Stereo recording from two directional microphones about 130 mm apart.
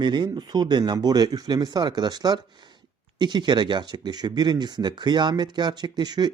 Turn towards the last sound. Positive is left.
turn(degrees=-30)  # may be behind; listen again after turning